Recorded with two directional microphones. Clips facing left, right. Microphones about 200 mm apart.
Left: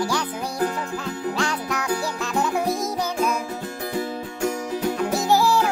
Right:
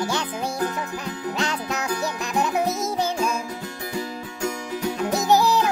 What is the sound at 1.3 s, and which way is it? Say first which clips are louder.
Music: left 1 dB; 20° right (ahead or behind).